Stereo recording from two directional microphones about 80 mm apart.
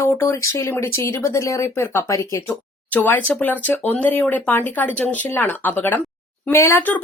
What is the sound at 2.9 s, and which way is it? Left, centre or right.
Speech, left.